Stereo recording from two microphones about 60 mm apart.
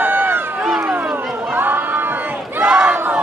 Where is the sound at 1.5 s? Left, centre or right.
Right.